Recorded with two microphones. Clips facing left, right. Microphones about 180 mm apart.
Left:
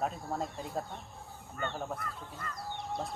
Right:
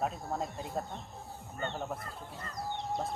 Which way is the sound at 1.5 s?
20° right (ahead or behind).